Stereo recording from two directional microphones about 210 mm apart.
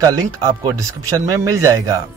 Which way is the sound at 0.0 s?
15° right (ahead or behind).